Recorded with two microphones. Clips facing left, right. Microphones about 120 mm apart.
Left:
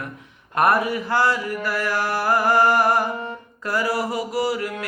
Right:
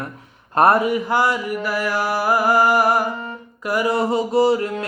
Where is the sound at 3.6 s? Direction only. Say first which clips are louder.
Right 4 dB; 15° right (ahead or behind).